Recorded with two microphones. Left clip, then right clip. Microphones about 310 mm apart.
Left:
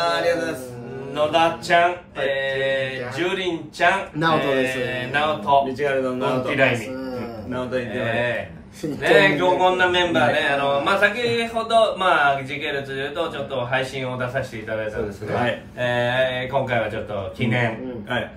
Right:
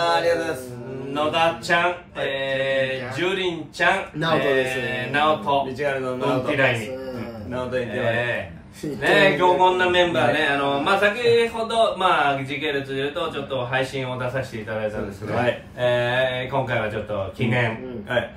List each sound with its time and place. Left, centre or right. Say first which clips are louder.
1.1 s mantra: left 2 dB; centre
15.4 s mantra: right 3 dB; centre